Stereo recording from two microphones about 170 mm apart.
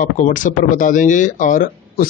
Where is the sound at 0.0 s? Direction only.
50° left (ahead or behind).